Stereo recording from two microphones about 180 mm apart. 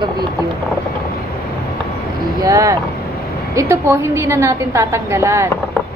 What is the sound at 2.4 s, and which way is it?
A woman's voice, 20° right (ahead or behind).